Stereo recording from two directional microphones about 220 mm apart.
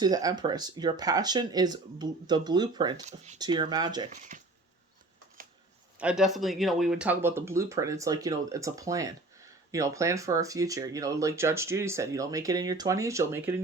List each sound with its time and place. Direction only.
0.0 s speech: 15° right (ahead or behind)
4.1 s speech: 35° right (ahead or behind)
6.0 s speech: 5° right (ahead or behind)